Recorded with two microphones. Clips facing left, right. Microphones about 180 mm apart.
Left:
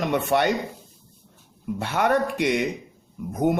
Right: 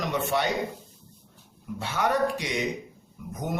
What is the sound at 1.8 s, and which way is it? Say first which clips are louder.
Speech: left 3 dB; 55° left (ahead or behind).